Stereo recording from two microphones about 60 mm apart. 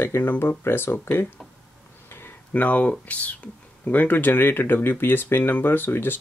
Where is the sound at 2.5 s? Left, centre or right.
Left.